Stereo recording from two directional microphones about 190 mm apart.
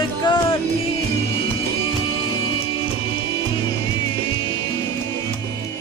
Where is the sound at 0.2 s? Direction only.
25° left (ahead or behind).